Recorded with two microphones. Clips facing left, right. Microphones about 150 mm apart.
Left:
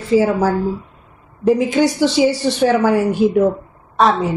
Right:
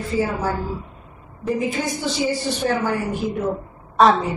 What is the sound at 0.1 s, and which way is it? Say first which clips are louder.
Speech: left 9 dB; 90° left.